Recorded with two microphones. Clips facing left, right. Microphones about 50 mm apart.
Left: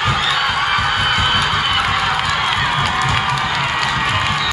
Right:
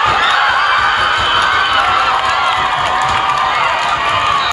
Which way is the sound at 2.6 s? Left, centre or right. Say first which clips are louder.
Right 3 dB; right.